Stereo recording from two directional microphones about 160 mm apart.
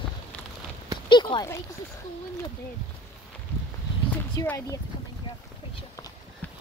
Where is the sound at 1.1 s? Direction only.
30° left (ahead or behind).